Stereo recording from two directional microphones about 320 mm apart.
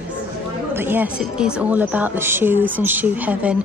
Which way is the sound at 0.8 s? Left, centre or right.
Centre.